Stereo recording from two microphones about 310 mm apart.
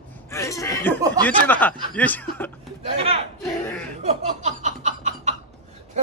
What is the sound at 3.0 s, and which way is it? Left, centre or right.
Battle cry, centre.